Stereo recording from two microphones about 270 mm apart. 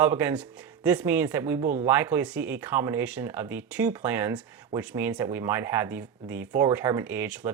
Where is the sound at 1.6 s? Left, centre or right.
Right.